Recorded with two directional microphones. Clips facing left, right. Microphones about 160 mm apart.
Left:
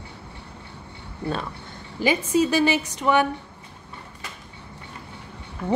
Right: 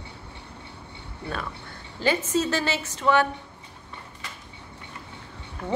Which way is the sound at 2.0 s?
10° left (ahead or behind).